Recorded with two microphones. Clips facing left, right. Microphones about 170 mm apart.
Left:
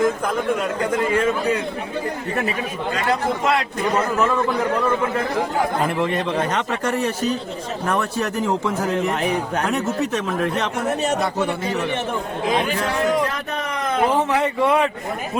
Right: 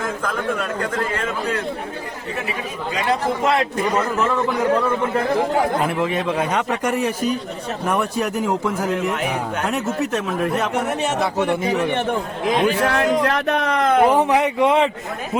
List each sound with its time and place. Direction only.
5.8 s a man's voice: centre (ahead or behind)
12.8 s speech: 70° right (ahead or behind)
14.1 s a man's voice: 15° right (ahead or behind)